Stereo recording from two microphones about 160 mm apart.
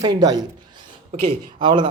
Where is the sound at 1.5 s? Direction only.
30° right (ahead or behind).